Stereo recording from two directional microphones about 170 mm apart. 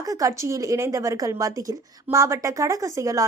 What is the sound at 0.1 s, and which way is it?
A woman's voice, 20° right (ahead or behind).